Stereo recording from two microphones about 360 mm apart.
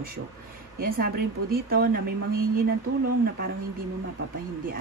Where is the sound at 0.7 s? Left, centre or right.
Right.